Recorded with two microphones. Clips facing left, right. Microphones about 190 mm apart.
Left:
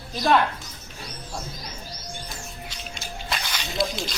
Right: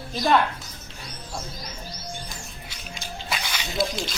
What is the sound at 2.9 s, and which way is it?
Music, centre (ahead or behind).